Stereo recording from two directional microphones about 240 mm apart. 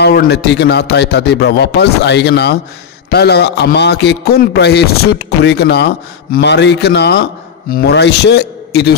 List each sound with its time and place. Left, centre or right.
0.0 s a man's voice: left